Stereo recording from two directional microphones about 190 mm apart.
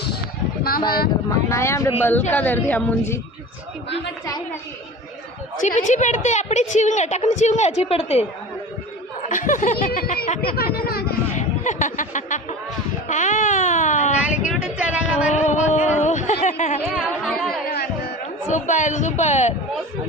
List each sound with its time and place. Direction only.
1.5 s a woman's voice: 15° left (ahead or behind)
5.6 s a woman's voice: 40° left (ahead or behind)
9.3 s snicker: 45° left (ahead or behind)
10.4 s speech: 55° left (ahead or behind)
11.3 s music: 40° left (ahead or behind)
13.1 s baby cry: 40° left (ahead or behind)
14.2 s a sound: 5° right (ahead or behind)
15.3 s a sound: 40° left (ahead or behind)
17.0 s music: 5° left (ahead or behind)
17.7 s music: 55° left (ahead or behind)
18.4 s a woman's voice: 40° left (ahead or behind)